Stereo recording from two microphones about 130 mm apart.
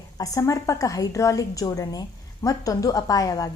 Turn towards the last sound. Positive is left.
turn(degrees=30)  # may be behind; listen again after turning